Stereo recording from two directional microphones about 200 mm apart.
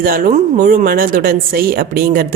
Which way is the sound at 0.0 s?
45° right (ahead or behind).